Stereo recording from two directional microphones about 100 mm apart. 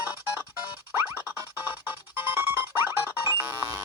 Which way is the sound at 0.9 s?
25° right (ahead or behind).